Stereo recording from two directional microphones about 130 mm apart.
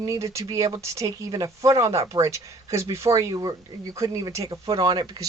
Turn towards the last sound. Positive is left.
turn(degrees=-35)  # may be behind; listen again after turning